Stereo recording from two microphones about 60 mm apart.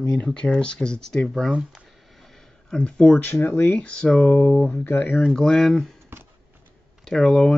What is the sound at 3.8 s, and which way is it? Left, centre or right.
Speech, centre.